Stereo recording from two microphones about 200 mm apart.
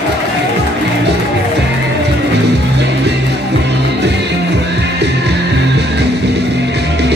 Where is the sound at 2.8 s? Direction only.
60° right (ahead or behind).